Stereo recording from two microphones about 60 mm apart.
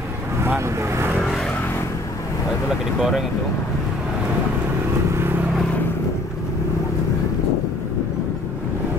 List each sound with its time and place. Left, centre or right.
0.6 s speech: right
3.0 s speech: centre